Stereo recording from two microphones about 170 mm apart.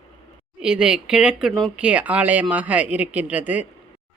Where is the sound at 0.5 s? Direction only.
5° right (ahead or behind).